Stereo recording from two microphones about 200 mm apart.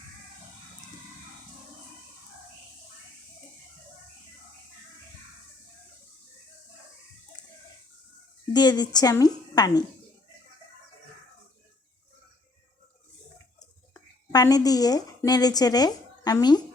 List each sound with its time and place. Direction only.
8.5 s a woman's voice: 20° left (ahead or behind)
13.9 s a woman's voice: 15° left (ahead or behind)